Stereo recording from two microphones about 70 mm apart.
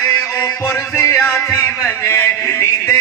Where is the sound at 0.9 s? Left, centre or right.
Left.